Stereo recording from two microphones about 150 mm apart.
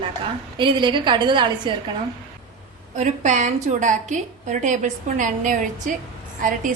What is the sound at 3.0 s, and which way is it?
A woman's voice, 55° right (ahead or behind).